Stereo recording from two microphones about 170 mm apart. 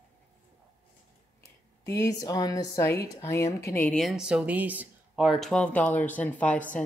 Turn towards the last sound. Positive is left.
turn(degrees=10)  # may be behind; listen again after turning